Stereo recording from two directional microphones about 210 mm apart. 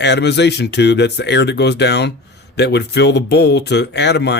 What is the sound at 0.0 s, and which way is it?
Speech, 55° left (ahead or behind).